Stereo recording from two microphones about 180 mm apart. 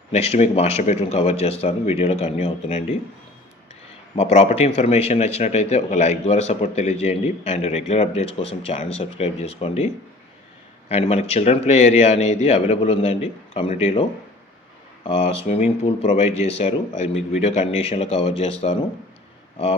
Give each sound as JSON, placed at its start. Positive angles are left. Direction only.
{"t": 0.1, "sound": "a man's voice", "side_deg": 35}
{"t": 4.1, "sound": "a man's voice", "side_deg": 35}